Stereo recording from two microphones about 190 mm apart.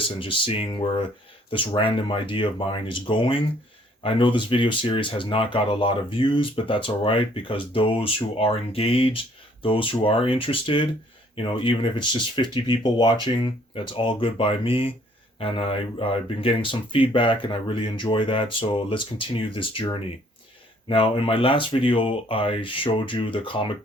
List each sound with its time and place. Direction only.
0.2 s speech: 30° left (ahead or behind)